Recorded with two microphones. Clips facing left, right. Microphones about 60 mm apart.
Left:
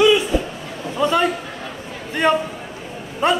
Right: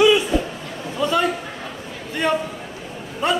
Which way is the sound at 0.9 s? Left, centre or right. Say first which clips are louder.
Left 2 dB; left.